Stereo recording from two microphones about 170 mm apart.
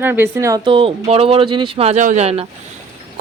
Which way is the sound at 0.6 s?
30° right (ahead or behind).